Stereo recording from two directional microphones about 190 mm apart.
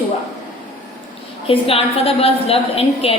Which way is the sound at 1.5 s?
30° left (ahead or behind).